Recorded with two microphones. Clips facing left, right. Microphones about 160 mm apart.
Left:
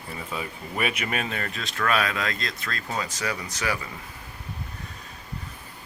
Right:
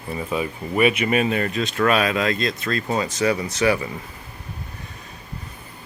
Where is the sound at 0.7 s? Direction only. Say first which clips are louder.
Right 10 dB; 10° right (ahead or behind).